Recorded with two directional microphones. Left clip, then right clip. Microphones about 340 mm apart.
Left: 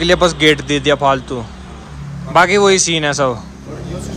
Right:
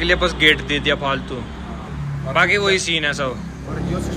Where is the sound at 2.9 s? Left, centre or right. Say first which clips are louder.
Left 5 dB; centre.